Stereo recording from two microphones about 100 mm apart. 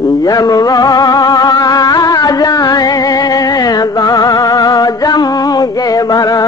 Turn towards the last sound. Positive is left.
turn(degrees=40)  # may be behind; listen again after turning